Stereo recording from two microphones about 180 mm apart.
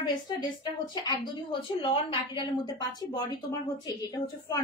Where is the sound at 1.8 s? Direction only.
30° left (ahead or behind).